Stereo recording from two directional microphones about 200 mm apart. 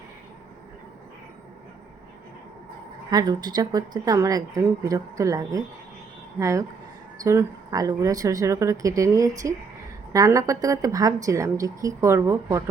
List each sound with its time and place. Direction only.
3.1 s a woman's voice: 20° right (ahead or behind)